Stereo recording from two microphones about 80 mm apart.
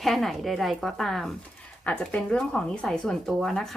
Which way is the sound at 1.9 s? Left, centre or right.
Centre.